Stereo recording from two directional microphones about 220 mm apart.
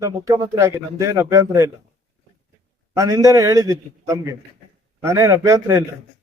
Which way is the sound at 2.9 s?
15° right (ahead or behind).